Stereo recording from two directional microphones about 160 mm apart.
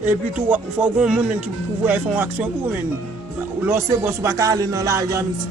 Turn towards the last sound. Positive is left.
turn(degrees=-20)  # may be behind; listen again after turning